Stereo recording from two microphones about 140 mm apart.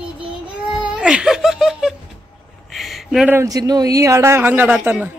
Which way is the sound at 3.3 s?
20° right (ahead or behind).